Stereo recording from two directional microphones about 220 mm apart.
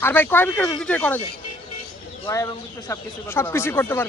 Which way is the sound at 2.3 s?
15° left (ahead or behind).